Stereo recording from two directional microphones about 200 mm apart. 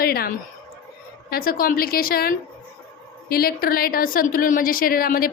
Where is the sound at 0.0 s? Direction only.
50° left (ahead or behind).